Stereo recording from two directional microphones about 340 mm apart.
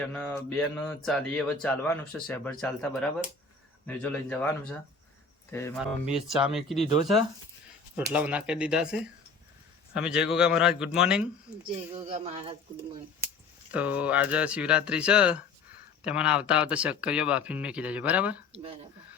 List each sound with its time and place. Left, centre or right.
0.0 s speech: centre
7.9 s speech: centre
11.9 s speech: centre
13.7 s speech: centre
18.5 s speech: centre